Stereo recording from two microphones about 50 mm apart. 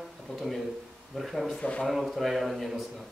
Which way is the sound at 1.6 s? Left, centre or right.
Centre.